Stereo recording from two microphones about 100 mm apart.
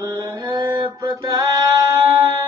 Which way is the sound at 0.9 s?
40° right (ahead or behind).